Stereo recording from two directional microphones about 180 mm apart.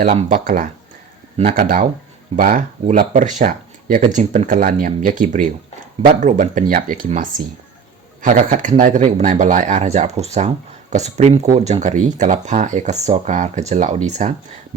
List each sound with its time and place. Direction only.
0.3 s speech: 50° right (ahead or behind)